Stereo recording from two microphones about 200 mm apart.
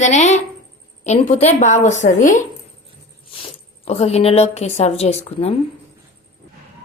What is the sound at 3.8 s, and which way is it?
A woman's voice, 30° left (ahead or behind).